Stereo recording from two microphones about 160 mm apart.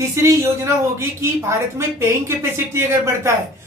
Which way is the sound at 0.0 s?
15° right (ahead or behind).